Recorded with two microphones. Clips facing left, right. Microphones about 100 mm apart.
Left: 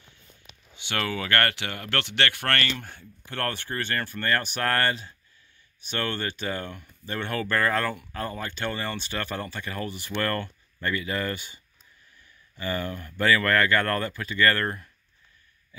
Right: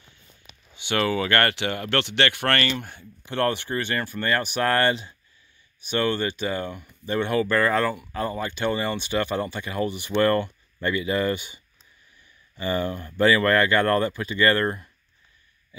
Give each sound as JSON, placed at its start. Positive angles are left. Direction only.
{"t": 0.7, "sound": "speech", "side_deg": -10}